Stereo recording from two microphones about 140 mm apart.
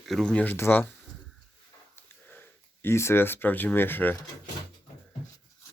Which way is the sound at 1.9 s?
15° left (ahead or behind).